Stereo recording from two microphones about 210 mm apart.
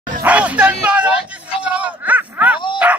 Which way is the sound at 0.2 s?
5° right (ahead or behind).